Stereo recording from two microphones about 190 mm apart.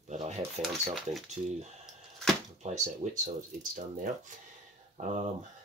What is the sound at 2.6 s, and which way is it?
Speech, 35° right (ahead or behind).